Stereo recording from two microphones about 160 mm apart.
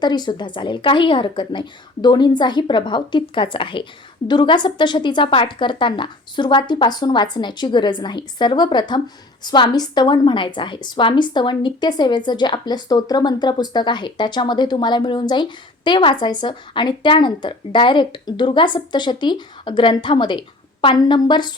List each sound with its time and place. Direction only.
0.0 s a woman's voice: 25° left (ahead or behind)